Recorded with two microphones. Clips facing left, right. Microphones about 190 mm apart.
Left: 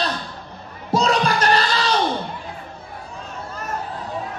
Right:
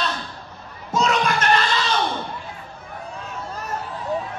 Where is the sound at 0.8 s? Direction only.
35° left (ahead or behind).